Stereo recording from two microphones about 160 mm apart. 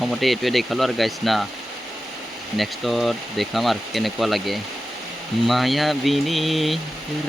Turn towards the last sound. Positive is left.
turn(degrees=0)  # may be behind; listen again after turning